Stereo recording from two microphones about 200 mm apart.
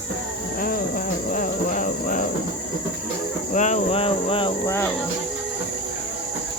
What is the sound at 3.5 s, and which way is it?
Speech, 35° left (ahead or behind).